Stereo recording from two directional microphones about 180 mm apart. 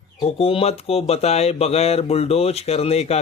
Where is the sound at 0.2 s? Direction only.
35° left (ahead or behind).